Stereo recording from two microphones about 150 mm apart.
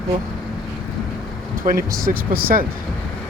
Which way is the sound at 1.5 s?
65° right (ahead or behind).